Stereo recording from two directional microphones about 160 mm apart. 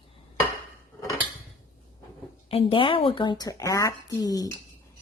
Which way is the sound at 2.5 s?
35° left (ahead or behind).